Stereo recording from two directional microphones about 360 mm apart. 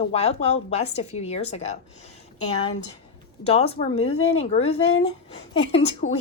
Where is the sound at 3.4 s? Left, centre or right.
Centre.